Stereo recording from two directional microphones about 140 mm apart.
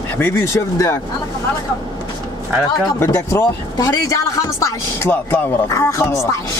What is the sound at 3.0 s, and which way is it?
Speech, 20° left (ahead or behind).